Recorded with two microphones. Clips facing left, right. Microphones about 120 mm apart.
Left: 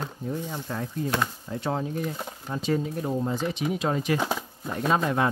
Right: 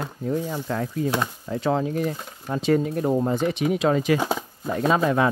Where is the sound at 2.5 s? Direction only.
70° right (ahead or behind); by 4.2 s 90° right.